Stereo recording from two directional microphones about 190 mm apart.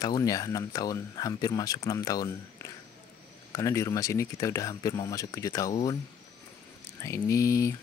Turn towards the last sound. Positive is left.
turn(degrees=15)  # may be behind; listen again after turning